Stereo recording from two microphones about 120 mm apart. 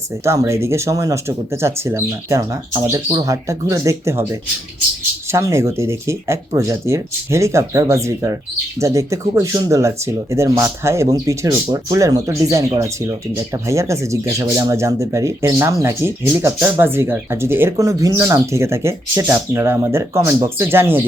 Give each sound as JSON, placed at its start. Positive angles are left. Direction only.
{"t": 0.3, "sound": "speech", "side_deg": -25}